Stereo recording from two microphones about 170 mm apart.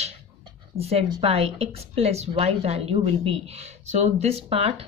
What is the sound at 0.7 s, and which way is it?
A woman's voice, 35° right (ahead or behind).